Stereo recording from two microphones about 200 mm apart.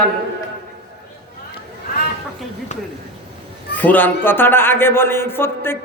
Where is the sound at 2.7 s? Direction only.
35° left (ahead or behind).